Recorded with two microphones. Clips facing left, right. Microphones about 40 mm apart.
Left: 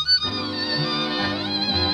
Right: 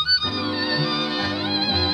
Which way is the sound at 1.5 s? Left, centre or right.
Centre.